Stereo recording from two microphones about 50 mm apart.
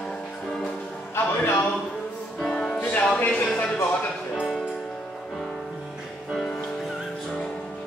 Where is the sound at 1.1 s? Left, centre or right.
Left.